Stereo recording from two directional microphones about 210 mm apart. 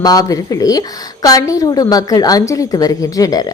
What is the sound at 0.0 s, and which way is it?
A woman's voice, 15° left (ahead or behind).